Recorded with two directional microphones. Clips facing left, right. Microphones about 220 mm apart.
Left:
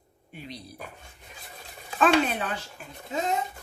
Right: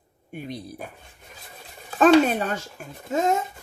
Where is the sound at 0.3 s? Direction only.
50° right (ahead or behind).